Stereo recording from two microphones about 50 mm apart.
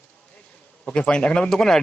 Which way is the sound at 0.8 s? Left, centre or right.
Centre.